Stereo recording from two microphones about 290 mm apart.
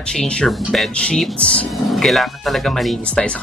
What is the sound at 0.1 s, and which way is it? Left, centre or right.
Speech, centre.